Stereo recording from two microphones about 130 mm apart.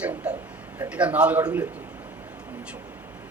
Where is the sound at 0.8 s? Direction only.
10° right (ahead or behind).